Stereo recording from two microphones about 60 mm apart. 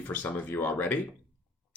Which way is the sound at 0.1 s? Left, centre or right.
Left.